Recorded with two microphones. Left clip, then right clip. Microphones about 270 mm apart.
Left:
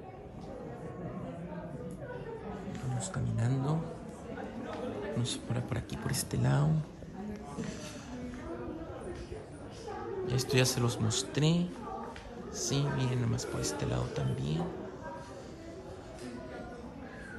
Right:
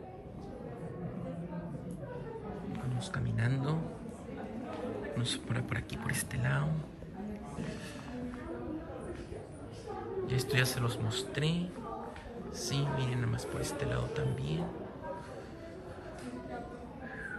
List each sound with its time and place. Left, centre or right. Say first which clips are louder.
3.0 s speech: right 1 dB; centre
5.1 s speech: even; centre
10.2 s speech: left 2 dB; centre